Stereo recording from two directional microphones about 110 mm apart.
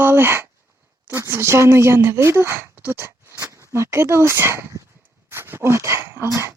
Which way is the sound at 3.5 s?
25° right (ahead or behind).